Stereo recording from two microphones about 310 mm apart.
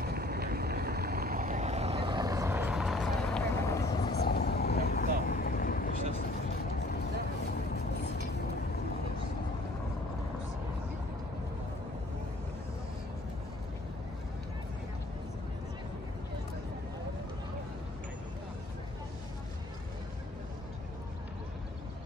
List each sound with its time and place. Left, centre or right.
0.0 s boat: right; by 4.1 s centre
4.2 s vehicle: left